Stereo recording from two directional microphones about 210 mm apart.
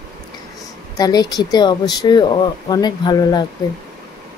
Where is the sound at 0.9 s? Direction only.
20° left (ahead or behind).